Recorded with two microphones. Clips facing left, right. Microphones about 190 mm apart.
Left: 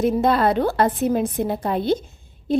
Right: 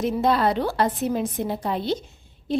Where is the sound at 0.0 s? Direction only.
50° left (ahead or behind).